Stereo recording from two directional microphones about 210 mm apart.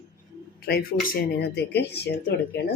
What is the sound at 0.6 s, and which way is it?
Speech, 45° left (ahead or behind).